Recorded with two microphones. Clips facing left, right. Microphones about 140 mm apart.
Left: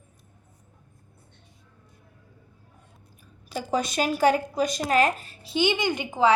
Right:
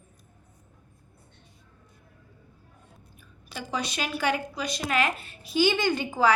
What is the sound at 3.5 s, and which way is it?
A woman's voice, 45° left (ahead or behind).